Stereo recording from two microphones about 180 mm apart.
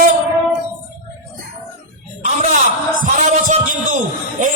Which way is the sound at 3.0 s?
45° right (ahead or behind).